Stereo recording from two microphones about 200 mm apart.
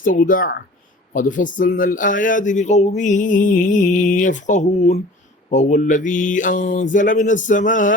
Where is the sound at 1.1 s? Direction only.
40° left (ahead or behind).